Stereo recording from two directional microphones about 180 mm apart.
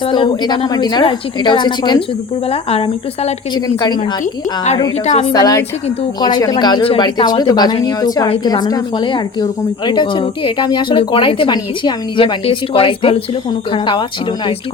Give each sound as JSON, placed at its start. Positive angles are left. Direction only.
{"t": 0.1, "sound": "a woman's voice", "side_deg": 25}
{"t": 5.3, "sound": "a woman's voice", "side_deg": 20}